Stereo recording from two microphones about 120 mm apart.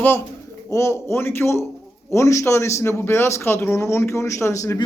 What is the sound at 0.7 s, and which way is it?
Speech, 25° left (ahead or behind).